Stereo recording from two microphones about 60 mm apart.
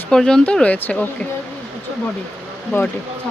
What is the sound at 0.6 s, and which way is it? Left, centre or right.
Speech, left.